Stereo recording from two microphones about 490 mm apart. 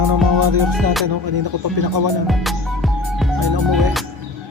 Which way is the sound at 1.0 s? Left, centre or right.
Right.